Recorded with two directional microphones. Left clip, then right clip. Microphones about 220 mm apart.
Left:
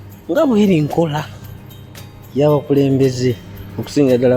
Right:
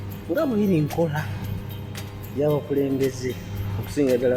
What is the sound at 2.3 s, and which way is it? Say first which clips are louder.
Speech: left 9 dB; 45° left (ahead or behind).